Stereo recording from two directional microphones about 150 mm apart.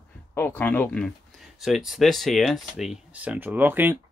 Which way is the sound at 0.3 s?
15° left (ahead or behind).